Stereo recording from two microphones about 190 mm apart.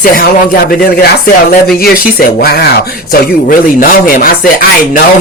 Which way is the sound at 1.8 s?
55° left (ahead or behind).